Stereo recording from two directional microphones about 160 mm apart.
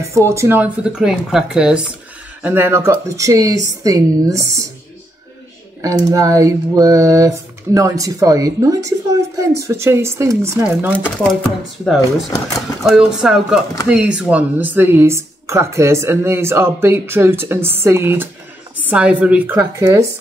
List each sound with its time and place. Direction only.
0.0 s speech: 20° right (ahead or behind)
5.8 s speech: 20° right (ahead or behind)
11.0 s speech: 5° left (ahead or behind); by 20.1 s 20° right (ahead or behind)